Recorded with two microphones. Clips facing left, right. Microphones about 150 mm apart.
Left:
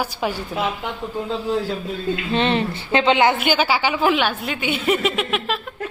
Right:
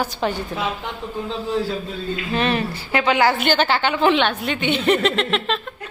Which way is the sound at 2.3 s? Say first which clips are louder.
Left 1 dB; 25° left (ahead or behind).